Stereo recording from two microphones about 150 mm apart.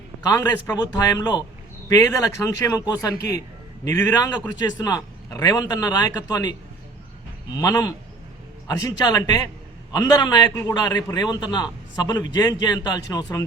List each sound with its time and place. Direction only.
0.2 s a man's voice: 25° left (ahead or behind)
7.5 s a man's voice: 20° left (ahead or behind)